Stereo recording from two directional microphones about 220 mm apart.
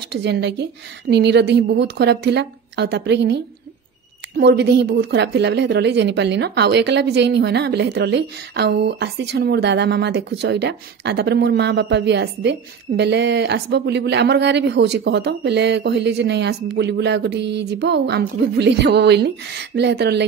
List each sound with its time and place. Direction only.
0.1 s a woman's voice: 50° right (ahead or behind)
4.4 s a woman's voice: 50° right (ahead or behind)